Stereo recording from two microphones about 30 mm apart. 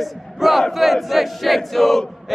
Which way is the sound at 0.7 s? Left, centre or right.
Centre.